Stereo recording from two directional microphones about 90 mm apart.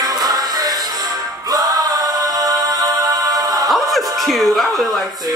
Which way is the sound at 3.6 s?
Centre (ahead or behind).